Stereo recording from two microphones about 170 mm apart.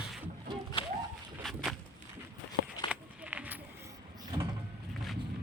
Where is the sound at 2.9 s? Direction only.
10° right (ahead or behind).